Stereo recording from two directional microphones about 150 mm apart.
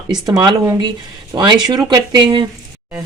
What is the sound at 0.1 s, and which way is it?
Speech, 25° right (ahead or behind).